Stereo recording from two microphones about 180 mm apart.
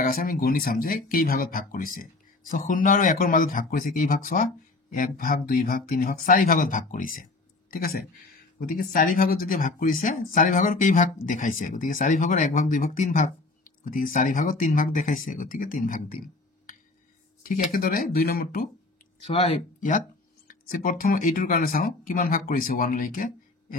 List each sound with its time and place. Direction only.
0.0 s speech: 50° left (ahead or behind)
17.7 s speech: 55° left (ahead or behind)
19.2 s speech: 40° left (ahead or behind)
20.4 s speech: 50° left (ahead or behind)